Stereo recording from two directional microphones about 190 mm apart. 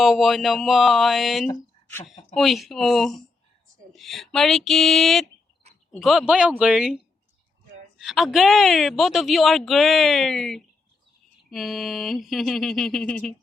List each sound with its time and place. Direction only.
0.0 s speech: centre (ahead or behind)
1.5 s a sound: 10° left (ahead or behind)
2.3 s speech: centre (ahead or behind)